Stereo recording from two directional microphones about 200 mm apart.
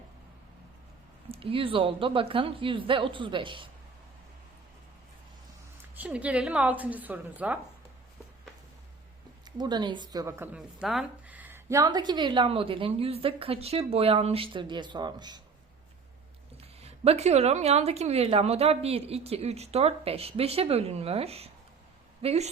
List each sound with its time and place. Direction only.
1.3 s a woman's voice: 25° right (ahead or behind)
5.9 s a woman's voice: 10° right (ahead or behind)
9.4 s a woman's voice: 20° right (ahead or behind)
16.6 s a woman's voice: 30° right (ahead or behind)